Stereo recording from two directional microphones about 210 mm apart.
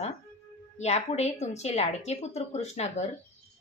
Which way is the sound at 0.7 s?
30° left (ahead or behind).